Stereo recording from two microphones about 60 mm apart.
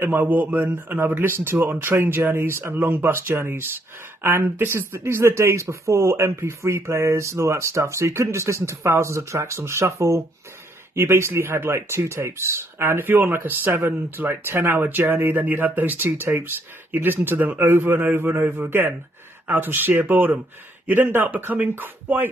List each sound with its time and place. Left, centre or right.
0.0 s a man's voice: right
0.7 s speech: right
11.0 s speech: right
13.0 s speech: right